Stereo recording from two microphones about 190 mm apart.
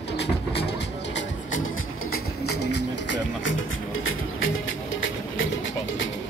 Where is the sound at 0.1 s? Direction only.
60° left (ahead or behind); by 4.9 s 90° left.